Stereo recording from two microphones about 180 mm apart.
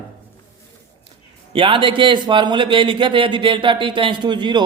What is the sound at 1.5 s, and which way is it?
Speech, 30° right (ahead or behind).